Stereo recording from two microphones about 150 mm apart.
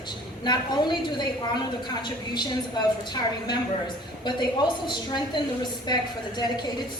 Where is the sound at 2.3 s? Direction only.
30° left (ahead or behind).